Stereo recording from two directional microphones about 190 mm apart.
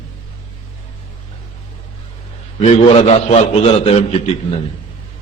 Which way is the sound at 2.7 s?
35° left (ahead or behind).